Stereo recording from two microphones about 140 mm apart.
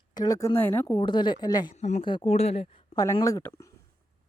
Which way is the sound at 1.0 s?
35° left (ahead or behind).